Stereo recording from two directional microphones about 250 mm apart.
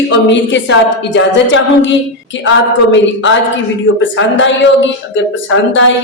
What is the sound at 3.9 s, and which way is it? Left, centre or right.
A woman's voice, left.